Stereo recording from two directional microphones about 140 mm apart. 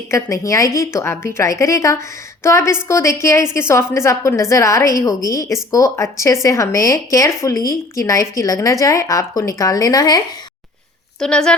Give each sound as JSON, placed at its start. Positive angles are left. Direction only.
{"t": 0.1, "sound": "speech", "side_deg": 20}
{"t": 11.2, "sound": "speech", "side_deg": 5}